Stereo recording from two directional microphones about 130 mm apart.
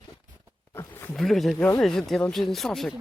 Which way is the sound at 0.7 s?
20° left (ahead or behind).